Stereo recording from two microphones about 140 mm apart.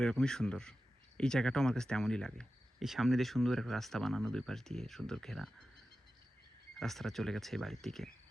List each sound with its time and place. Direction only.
0.0 s speech: 5° left (ahead or behind)
6.7 s speech: centre (ahead or behind)